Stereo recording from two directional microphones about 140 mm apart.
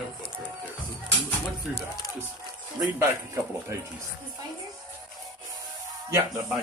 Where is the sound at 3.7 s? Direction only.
20° right (ahead or behind).